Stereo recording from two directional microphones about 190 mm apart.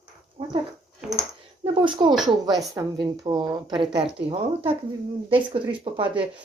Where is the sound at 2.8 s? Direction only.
15° right (ahead or behind).